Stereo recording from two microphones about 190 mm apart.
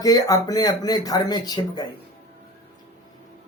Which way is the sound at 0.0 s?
20° left (ahead or behind).